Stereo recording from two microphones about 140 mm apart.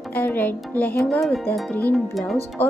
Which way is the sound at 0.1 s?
10° left (ahead or behind).